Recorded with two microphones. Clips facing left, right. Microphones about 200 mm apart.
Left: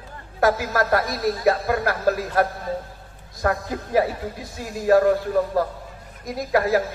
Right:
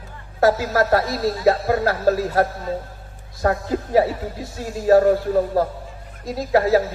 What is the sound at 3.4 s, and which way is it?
A man's voice, 25° right (ahead or behind).